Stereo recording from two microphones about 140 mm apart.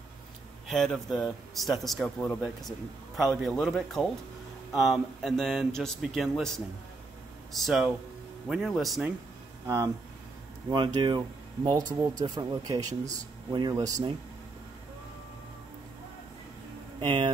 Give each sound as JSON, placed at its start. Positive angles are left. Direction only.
{"t": 0.7, "sound": "speech", "side_deg": 0}
{"t": 10.7, "sound": "speech", "side_deg": -30}
{"t": 17.0, "sound": "speech", "side_deg": -35}